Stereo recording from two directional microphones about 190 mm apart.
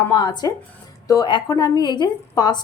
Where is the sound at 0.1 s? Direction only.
25° left (ahead or behind).